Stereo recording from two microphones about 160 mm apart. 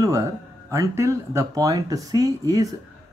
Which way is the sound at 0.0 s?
20° right (ahead or behind).